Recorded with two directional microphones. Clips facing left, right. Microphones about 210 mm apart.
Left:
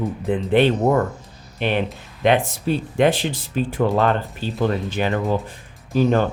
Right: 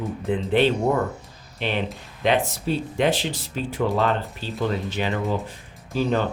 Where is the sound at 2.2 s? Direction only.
55° left (ahead or behind).